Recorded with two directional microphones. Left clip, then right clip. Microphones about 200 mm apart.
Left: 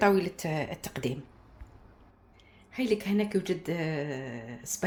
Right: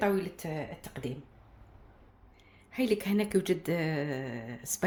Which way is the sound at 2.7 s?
15° right (ahead or behind).